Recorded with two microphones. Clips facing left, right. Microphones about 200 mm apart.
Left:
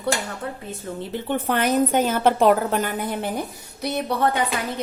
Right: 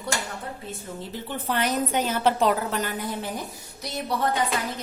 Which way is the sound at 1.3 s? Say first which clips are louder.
Left 5 dB; 55° left (ahead or behind).